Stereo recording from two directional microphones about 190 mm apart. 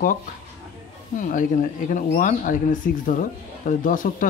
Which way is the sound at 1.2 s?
45° left (ahead or behind).